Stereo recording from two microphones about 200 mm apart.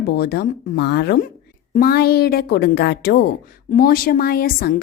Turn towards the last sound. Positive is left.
turn(degrees=45)  # may be behind; listen again after turning